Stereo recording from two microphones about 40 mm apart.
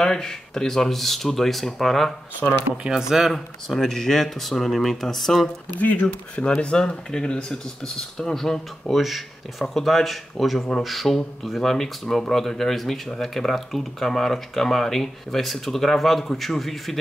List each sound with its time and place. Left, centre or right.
0.0 s speech: centre
2.8 s speech: centre
3.3 s speech: centre
5.8 s speech: left
6.3 s speech: left
8.9 s speech: centre